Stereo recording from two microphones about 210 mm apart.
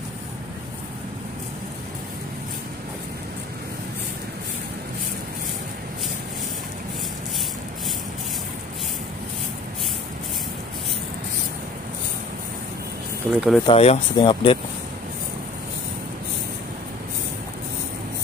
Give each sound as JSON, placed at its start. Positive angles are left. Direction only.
{"t": 13.3, "sound": "speech", "side_deg": -5}
{"t": 13.7, "sound": "speech", "side_deg": 25}